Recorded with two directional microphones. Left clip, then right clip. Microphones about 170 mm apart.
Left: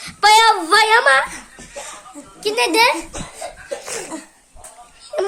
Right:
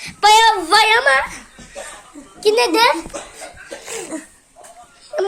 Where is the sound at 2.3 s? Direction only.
15° right (ahead or behind).